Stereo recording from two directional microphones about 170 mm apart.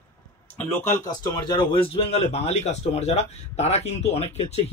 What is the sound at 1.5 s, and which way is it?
A man's voice, 30° left (ahead or behind).